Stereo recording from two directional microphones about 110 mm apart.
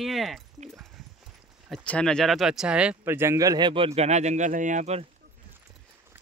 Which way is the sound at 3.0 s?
20° right (ahead or behind).